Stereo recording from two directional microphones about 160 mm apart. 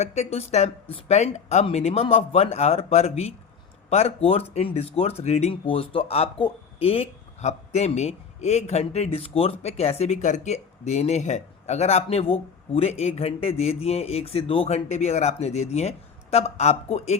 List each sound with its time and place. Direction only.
0.0 s speech: 45° left (ahead or behind)